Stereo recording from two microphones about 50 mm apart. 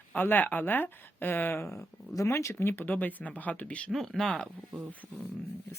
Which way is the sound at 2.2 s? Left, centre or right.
Left.